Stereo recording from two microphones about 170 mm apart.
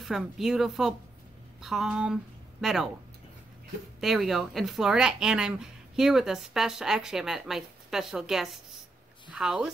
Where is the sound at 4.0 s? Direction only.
Centre (ahead or behind).